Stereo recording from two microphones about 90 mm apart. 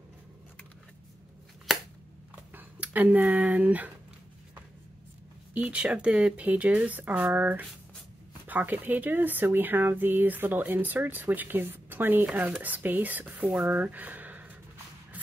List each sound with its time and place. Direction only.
2.5 s speech: 20° right (ahead or behind)
5.5 s speech: 15° right (ahead or behind)
15.1 s a sound: 15° right (ahead or behind)